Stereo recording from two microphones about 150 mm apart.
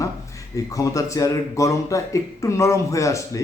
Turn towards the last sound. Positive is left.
turn(degrees=20)  # may be behind; listen again after turning